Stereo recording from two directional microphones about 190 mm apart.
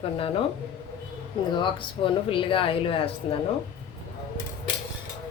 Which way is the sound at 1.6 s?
25° left (ahead or behind).